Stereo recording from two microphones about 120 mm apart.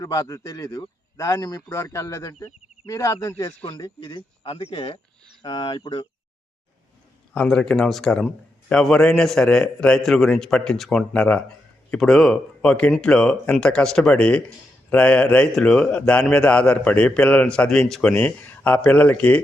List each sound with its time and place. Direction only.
0.0 s a man's voice: 30° left (ahead or behind)
7.3 s a man's voice: 5° left (ahead or behind)